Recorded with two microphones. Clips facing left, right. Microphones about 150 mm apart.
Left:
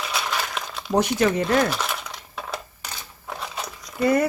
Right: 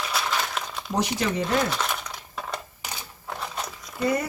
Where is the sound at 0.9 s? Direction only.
55° left (ahead or behind).